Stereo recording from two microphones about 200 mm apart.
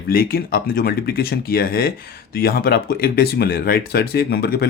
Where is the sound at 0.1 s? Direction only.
50° left (ahead or behind).